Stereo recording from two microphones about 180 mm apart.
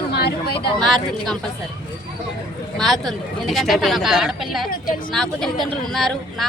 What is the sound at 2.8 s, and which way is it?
Speech, centre (ahead or behind).